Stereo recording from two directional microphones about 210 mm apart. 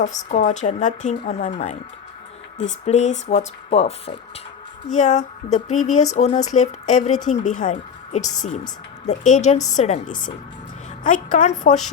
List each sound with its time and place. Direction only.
0.3 s speech: 35° left (ahead or behind)
11.0 s speech: 35° left (ahead or behind)